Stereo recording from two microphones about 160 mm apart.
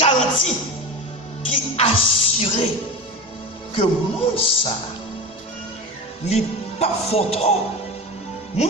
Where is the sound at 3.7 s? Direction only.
35° left (ahead or behind).